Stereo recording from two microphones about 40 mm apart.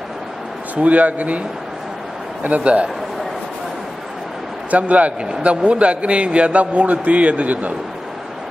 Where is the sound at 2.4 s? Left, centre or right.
Right.